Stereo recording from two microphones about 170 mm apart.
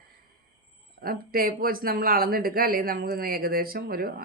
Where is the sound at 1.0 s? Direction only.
60° right (ahead or behind).